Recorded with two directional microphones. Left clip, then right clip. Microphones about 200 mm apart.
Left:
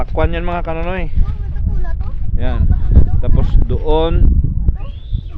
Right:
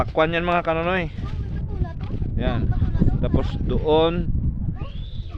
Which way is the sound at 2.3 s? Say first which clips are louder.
Left 1 dB; 5° right (ahead or behind).